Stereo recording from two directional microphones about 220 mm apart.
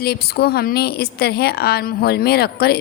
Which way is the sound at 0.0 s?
45° left (ahead or behind).